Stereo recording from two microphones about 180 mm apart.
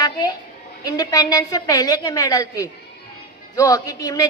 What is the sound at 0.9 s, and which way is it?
A woman's voice, 20° left (ahead or behind).